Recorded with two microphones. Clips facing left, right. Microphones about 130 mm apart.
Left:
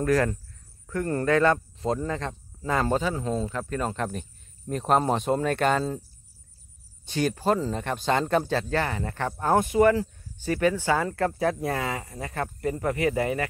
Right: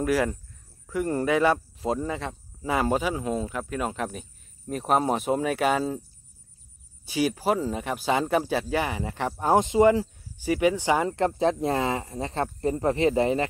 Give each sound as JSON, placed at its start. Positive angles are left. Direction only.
{"t": 0.0, "sound": "speech", "side_deg": -10}
{"t": 7.1, "sound": "speech", "side_deg": -5}